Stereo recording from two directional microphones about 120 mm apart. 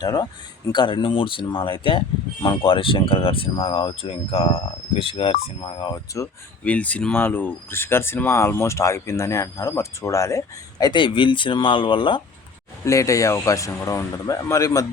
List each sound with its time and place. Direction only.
0.0 s speech: 35° left (ahead or behind)
6.2 s speech: 25° left (ahead or behind)
6.7 s speech: 10° left (ahead or behind); by 12.2 s 45° left (ahead or behind)
12.8 s speech: 25° left (ahead or behind)